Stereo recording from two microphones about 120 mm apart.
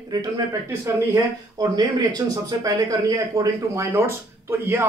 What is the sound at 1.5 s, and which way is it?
Speech, 35° right (ahead or behind).